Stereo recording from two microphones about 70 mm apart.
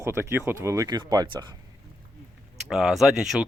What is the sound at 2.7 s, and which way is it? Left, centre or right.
Speech, centre.